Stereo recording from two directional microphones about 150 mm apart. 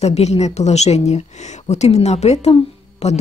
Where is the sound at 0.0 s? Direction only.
45° left (ahead or behind).